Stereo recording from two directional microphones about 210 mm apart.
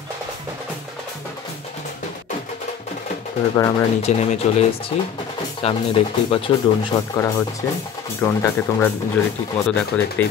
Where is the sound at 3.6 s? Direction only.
15° left (ahead or behind).